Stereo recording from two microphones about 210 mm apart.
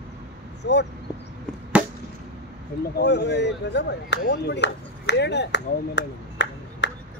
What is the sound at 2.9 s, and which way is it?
Speech, 55° left (ahead or behind).